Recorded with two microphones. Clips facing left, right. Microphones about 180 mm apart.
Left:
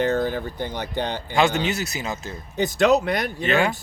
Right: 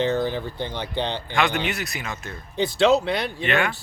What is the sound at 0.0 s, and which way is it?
Speech, 50° left (ahead or behind).